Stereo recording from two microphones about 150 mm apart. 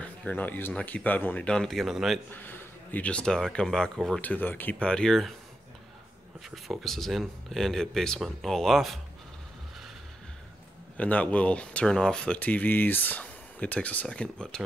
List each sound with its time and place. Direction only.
0.0 s speech: 10° left (ahead or behind)
2.3 s speech: 15° left (ahead or behind)
6.4 s speech: centre (ahead or behind)
11.0 s speech: 10° left (ahead or behind)